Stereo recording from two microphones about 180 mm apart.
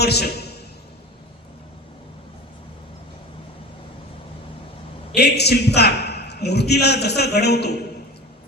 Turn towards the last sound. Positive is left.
turn(degrees=65)  # may be behind; listen again after turning